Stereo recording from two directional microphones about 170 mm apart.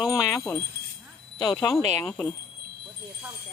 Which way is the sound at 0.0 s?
20° left (ahead or behind).